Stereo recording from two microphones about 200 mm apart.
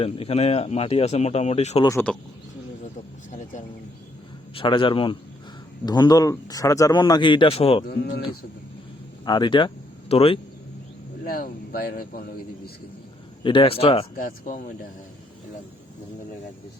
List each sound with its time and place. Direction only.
0.0 s speech: 30° left (ahead or behind)
1.9 s speech: 10° left (ahead or behind)
4.5 s speech: 25° left (ahead or behind)
7.9 s speech: 50° left (ahead or behind)
9.2 s speech: 20° left (ahead or behind)
11.2 s speech: 45° left (ahead or behind)
13.4 s speech: 25° left (ahead or behind)
14.2 s speech: 40° left (ahead or behind)